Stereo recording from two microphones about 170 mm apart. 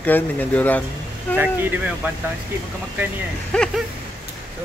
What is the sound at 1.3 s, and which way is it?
Speech, 10° right (ahead or behind).